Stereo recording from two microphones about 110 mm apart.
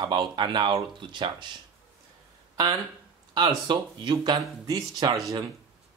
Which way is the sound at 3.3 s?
40° right (ahead or behind).